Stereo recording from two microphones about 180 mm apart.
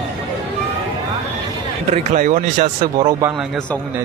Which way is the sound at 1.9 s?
45° right (ahead or behind).